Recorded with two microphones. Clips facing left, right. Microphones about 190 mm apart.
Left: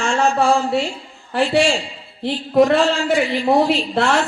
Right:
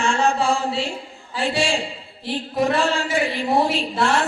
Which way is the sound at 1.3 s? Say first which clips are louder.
Left 6 dB; 60° left (ahead or behind).